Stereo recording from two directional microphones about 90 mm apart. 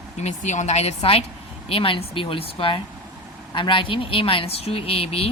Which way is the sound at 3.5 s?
65° left (ahead or behind).